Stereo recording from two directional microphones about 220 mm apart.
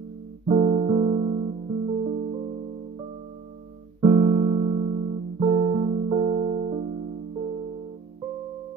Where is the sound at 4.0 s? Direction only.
20° right (ahead or behind).